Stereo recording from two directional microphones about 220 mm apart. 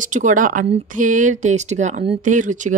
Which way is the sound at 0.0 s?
35° right (ahead or behind).